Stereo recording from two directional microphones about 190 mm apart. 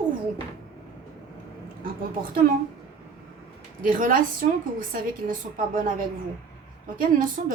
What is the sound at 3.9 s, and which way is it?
A woman's voice, 45° right (ahead or behind).